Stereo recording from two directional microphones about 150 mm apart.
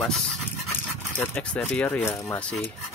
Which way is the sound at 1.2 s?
10° left (ahead or behind).